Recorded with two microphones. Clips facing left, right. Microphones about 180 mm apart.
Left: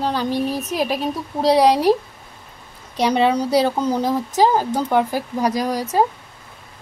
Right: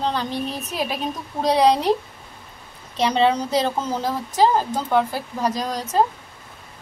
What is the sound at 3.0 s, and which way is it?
Speech, 10° left (ahead or behind).